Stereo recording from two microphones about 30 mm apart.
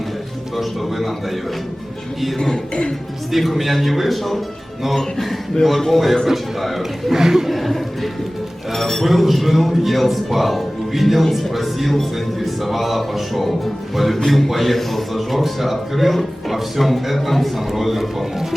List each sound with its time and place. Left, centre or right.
0.5 s speech: centre
2.4 s speech: left
3.3 s speech: centre
5.9 s speech: centre
7.1 s speech: centre
7.4 s speech: centre